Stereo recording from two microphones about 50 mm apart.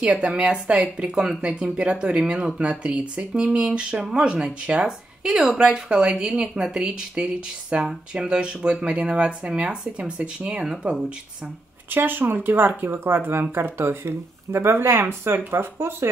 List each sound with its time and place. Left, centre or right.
0.0 s speech: right
11.9 s speech: right